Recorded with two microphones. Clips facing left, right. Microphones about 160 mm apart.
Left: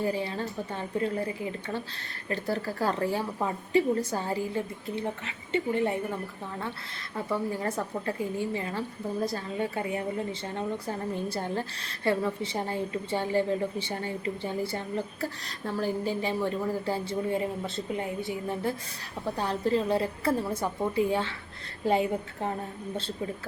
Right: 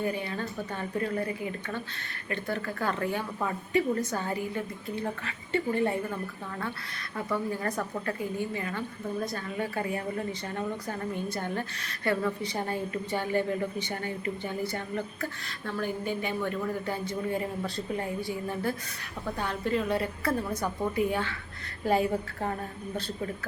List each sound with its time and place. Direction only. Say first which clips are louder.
0.0 s a woman's voice: left 2 dB; 30° left (ahead or behind)
7.5 s a woman's voice: left 1 dB; 25° left (ahead or behind)